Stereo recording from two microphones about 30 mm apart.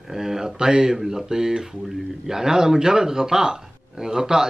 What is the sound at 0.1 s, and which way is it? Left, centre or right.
A man's voice, centre.